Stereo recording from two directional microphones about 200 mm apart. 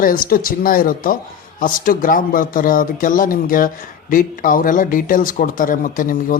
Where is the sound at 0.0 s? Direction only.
45° left (ahead or behind).